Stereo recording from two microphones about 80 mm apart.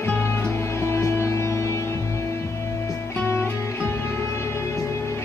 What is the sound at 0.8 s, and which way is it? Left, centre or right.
Music, left.